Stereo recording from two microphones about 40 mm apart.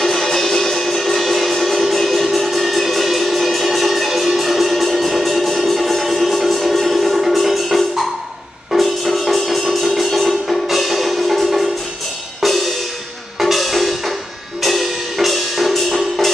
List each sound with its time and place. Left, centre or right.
0.0 s music: centre